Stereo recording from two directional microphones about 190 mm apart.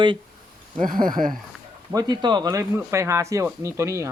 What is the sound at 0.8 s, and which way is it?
Speech, 45° right (ahead or behind).